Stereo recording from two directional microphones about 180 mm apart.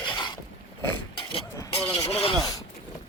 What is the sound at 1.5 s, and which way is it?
Vehicle, 15° left (ahead or behind).